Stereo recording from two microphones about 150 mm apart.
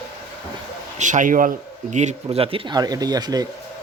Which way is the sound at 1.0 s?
55° right (ahead or behind).